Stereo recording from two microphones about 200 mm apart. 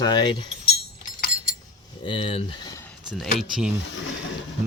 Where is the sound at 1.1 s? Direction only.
45° left (ahead or behind).